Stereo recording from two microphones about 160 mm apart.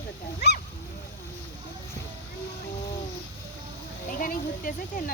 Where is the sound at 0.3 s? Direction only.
85° left.